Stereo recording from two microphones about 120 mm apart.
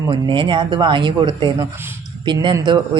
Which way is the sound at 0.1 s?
45° right (ahead or behind).